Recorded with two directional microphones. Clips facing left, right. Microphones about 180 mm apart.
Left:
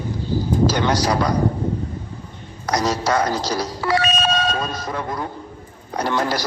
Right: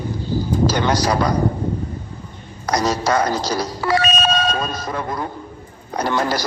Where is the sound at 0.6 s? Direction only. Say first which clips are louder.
Right 1 dB; 45° right (ahead or behind).